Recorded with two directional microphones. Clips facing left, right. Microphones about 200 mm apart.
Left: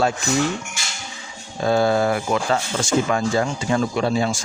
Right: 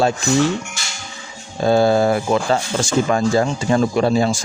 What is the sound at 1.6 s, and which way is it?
Speech, 30° right (ahead or behind).